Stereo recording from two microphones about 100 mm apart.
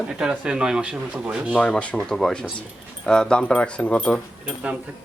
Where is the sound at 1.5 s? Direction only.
10° left (ahead or behind).